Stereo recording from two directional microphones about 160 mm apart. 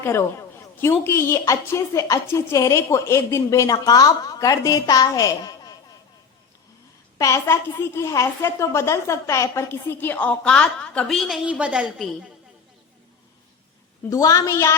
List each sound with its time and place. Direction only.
0.0 s a sound: 15° left (ahead or behind)
1.0 s a woman's voice: 15° left (ahead or behind)
7.2 s a woman's voice: 20° left (ahead or behind); by 12.3 s 5° right (ahead or behind)
14.1 s a woman's voice: 20° left (ahead or behind)